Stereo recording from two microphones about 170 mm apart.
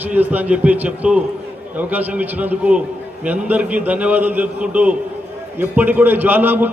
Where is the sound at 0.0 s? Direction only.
10° right (ahead or behind).